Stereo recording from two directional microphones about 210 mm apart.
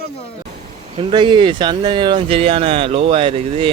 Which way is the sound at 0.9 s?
25° right (ahead or behind).